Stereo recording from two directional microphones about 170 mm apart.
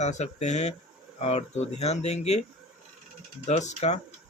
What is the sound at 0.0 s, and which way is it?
Speech, 40° left (ahead or behind).